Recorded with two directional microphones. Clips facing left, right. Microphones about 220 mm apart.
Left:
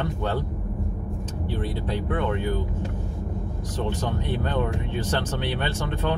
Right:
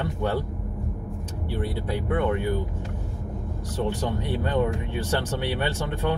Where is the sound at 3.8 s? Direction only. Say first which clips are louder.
Right 1 dB; 15° right (ahead or behind).